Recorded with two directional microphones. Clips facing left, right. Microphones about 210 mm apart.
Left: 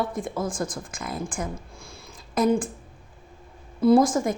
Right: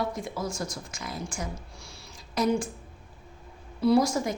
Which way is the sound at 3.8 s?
50° left (ahead or behind).